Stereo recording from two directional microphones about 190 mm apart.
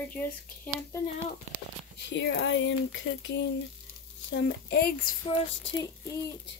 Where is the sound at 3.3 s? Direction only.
65° left (ahead or behind).